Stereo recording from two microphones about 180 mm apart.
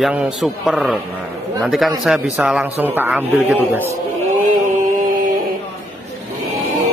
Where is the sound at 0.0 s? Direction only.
5° right (ahead or behind).